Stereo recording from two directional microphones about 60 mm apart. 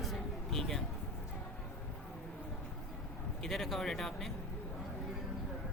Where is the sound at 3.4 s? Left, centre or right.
Centre.